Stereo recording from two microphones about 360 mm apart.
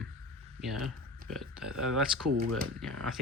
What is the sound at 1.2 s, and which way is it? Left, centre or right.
Speech, centre.